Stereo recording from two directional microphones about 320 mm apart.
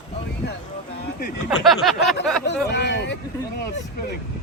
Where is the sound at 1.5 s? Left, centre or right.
Centre.